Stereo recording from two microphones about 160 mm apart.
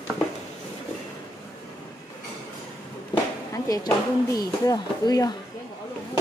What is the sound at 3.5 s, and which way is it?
Speech, 20° left (ahead or behind).